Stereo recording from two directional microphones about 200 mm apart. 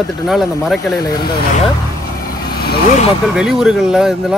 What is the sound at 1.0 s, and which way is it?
Speech, 20° left (ahead or behind).